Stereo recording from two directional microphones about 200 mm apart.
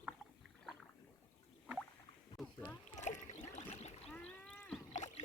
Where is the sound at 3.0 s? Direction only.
35° left (ahead or behind).